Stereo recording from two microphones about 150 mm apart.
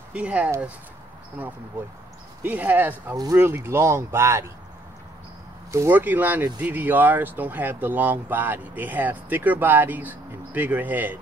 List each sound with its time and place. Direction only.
0.1 s speech: 10° right (ahead or behind)
5.7 s speech: 15° right (ahead or behind)